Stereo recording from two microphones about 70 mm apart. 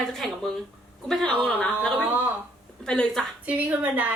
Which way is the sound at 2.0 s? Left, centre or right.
Right.